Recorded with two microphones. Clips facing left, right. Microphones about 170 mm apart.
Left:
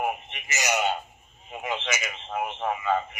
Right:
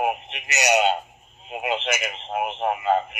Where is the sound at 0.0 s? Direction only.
75° right (ahead or behind).